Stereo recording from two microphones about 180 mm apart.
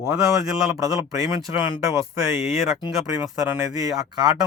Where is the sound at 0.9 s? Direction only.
20° right (ahead or behind).